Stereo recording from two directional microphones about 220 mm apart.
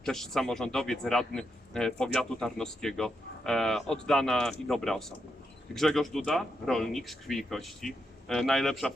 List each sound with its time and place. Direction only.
0.0 s speech: centre (ahead or behind)